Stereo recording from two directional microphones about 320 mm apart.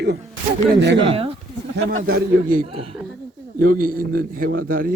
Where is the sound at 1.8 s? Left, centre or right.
Right.